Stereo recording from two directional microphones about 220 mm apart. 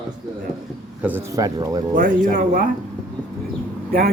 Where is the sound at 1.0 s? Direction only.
10° right (ahead or behind).